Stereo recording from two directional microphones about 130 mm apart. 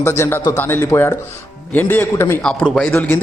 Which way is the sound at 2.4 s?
5° left (ahead or behind).